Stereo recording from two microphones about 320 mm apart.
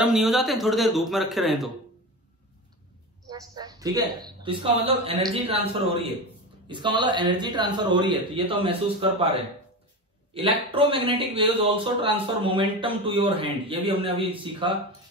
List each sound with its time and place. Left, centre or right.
0.0 s a man's voice: centre
3.3 s a man's voice: centre
10.3 s a man's voice: centre